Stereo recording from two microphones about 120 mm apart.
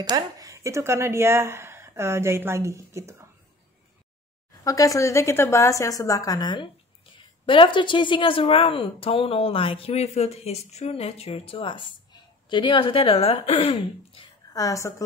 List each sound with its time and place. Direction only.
0.0 s a woman's voice: 30° right (ahead or behind)
4.6 s a woman's voice: 30° left (ahead or behind); by 14.2 s 55° left (ahead or behind)
14.5 s a woman's voice: 30° left (ahead or behind)